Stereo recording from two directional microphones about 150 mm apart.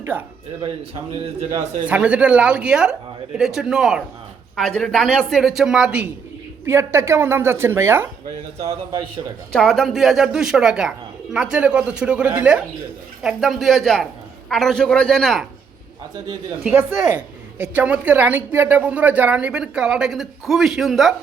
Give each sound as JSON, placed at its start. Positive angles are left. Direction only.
{"t": 0.0, "sound": "speech", "side_deg": -15}
{"t": 1.9, "sound": "a woman's voice", "side_deg": -10}
{"t": 6.7, "sound": "a woman's voice", "side_deg": -15}
{"t": 8.9, "sound": "a man's voice", "side_deg": -30}
{"t": 9.5, "sound": "a woman's voice", "side_deg": 5}
{"t": 16.6, "sound": "a woman's voice", "side_deg": -10}